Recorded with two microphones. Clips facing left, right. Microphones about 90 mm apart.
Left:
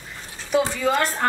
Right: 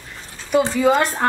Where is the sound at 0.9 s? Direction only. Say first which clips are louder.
Right 6 dB; 20° right (ahead or behind).